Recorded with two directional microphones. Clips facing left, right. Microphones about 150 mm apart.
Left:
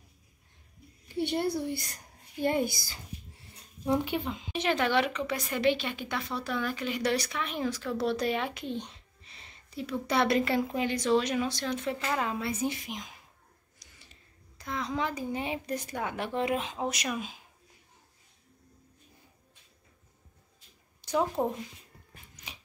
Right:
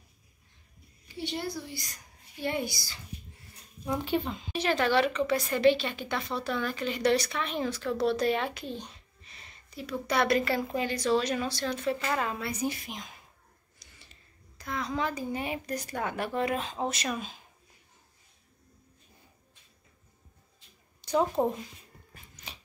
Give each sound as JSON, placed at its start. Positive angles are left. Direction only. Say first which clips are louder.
{"t": 1.0, "sound": "a woman's voice", "louder": "left 6 dB", "side_deg": 55}
{"t": 4.3, "sound": "speech", "louder": "even", "side_deg": 15}
{"t": 13.7, "sound": "a sound", "louder": "right 1 dB", "side_deg": 15}
{"t": 14.6, "sound": "speech", "louder": "even", "side_deg": 20}
{"t": 21.1, "sound": "speech", "louder": "right 2 dB", "side_deg": -15}
{"t": 22.3, "sound": "dog", "louder": "right 1 dB", "side_deg": 15}